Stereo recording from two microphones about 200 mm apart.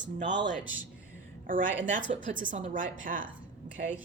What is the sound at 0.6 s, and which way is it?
Speech, 10° right (ahead or behind).